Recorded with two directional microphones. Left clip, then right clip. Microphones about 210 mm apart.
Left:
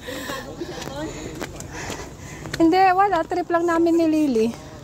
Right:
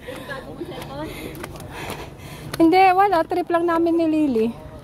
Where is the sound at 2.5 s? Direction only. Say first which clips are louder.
Right 2 dB; 15° right (ahead or behind).